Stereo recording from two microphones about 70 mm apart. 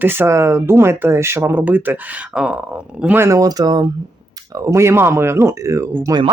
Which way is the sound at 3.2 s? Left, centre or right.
Right.